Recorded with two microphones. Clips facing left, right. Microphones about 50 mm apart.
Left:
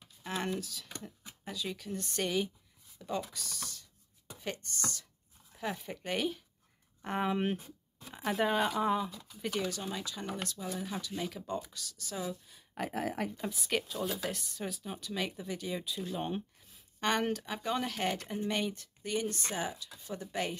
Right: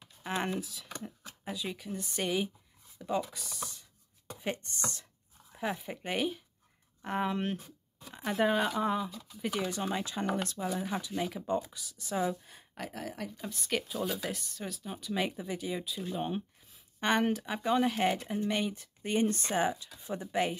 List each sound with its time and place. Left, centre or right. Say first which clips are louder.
0.2 s speech: right 2 dB; right
5.7 s speech: right 1 dB; centre
9.7 s speech: right 4 dB; right
10.9 s speech: right 4 dB; centre
12.9 s speech: left 6 dB; left
13.6 s speech: right 2 dB; centre
15.1 s speech: right 4 dB; centre
19.0 s speech: right 5 dB; right